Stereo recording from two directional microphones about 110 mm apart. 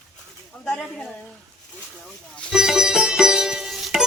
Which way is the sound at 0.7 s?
5° left (ahead or behind).